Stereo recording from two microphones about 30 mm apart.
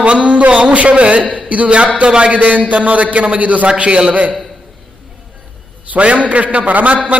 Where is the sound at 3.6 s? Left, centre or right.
Right.